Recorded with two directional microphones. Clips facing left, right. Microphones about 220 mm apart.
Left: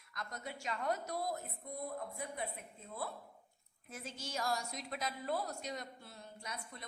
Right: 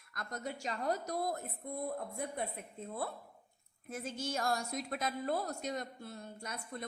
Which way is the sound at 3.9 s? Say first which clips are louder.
Right 6 dB; 50° right (ahead or behind).